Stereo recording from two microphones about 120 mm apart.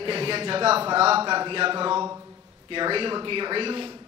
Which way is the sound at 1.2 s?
40° right (ahead or behind).